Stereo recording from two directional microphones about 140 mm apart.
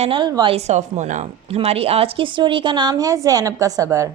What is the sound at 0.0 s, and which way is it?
Speech, 40° right (ahead or behind).